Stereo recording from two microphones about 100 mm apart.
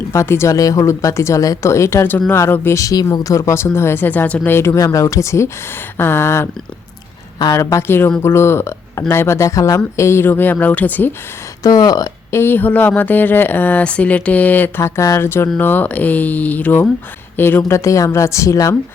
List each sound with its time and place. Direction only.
0.1 s speech: 30° left (ahead or behind)
7.5 s speech: 30° left (ahead or behind)
11.6 s a woman's voice: 40° left (ahead or behind)
12.3 s speech: 25° left (ahead or behind)
17.6 s a woman's voice: 30° left (ahead or behind)